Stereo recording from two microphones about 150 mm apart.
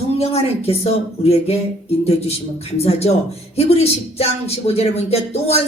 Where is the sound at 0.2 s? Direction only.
40° left (ahead or behind).